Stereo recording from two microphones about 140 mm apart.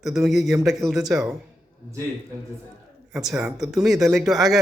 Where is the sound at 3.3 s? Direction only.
10° right (ahead or behind).